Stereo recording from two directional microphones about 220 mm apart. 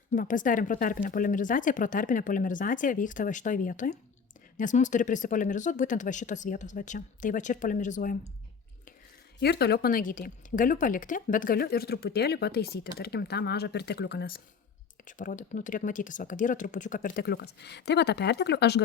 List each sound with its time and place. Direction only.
0.1 s speech: 35° left (ahead or behind)
9.4 s a woman's voice: 50° left (ahead or behind)